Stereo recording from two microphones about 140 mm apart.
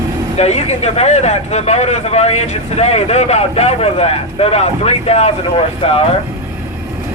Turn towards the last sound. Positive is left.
turn(degrees=45)  # may be behind; listen again after turning